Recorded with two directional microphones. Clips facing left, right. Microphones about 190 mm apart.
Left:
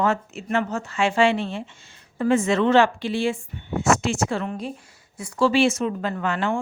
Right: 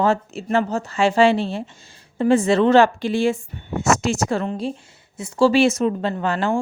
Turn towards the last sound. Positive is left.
turn(degrees=-35)  # may be behind; listen again after turning